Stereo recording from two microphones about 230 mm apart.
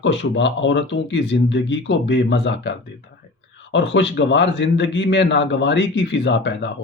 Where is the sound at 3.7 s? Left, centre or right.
Left.